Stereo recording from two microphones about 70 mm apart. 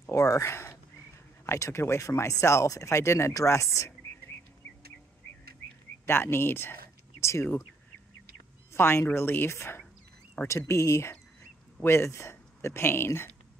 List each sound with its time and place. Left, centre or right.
0.0 s whispering: left
1.4 s speech: left
6.0 s speech: left
8.7 s speech: left
10.4 s speech: left
10.7 s speech: left